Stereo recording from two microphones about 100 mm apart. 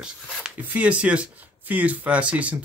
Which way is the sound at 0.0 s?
10° right (ahead or behind).